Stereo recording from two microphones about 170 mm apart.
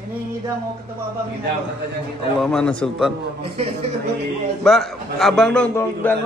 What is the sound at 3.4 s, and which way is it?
Speech, 35° right (ahead or behind).